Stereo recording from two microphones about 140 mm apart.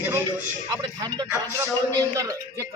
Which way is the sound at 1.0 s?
30° right (ahead or behind).